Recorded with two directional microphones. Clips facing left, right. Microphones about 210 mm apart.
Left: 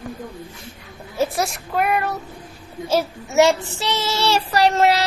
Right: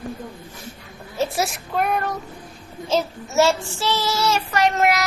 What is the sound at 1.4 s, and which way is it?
Child singing, centre (ahead or behind).